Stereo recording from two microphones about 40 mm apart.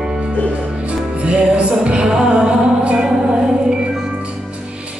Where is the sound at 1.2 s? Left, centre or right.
Right.